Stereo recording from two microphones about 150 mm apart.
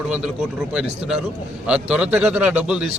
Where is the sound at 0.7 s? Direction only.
5° right (ahead or behind).